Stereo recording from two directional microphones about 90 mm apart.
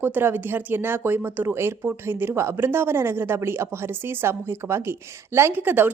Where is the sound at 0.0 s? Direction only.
25° right (ahead or behind).